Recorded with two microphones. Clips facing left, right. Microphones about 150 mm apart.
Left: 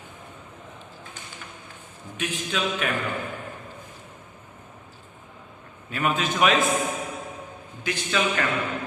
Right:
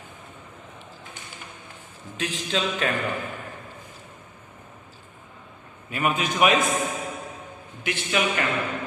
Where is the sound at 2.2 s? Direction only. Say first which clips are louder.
Right 1 dB; 30° right (ahead or behind).